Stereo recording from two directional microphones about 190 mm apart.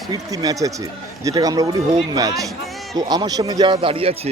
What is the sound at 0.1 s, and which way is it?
Speech, 20° right (ahead or behind).